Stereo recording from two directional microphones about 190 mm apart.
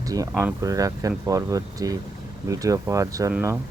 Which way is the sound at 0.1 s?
20° right (ahead or behind).